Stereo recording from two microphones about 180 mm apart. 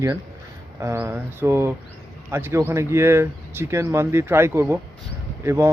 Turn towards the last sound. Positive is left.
turn(degrees=-15)  # may be behind; listen again after turning